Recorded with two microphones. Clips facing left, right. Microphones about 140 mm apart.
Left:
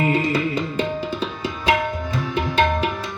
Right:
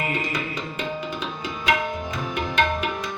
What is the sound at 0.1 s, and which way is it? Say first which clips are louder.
Music: left 8 dB; 30° left (ahead or behind).